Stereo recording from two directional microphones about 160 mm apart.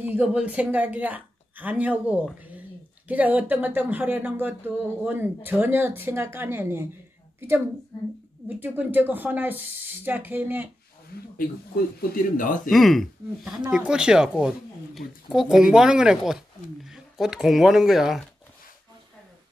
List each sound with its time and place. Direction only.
0.0 s a woman's voice: 10° right (ahead or behind)
12.0 s speech: 60° left (ahead or behind)
12.7 s speech: centre (ahead or behind)